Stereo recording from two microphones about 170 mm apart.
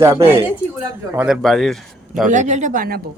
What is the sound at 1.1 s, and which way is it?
Speech, 10° right (ahead or behind).